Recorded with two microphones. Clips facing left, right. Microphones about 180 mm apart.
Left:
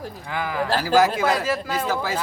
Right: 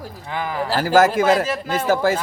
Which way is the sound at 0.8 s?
50° right (ahead or behind).